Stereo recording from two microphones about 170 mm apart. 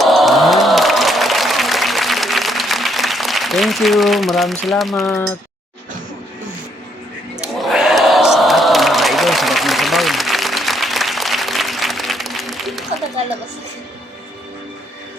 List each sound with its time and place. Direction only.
0.0 s applause: centre (ahead or behind)
4.6 s speech: centre (ahead or behind)
7.3 s a sound: centre (ahead or behind)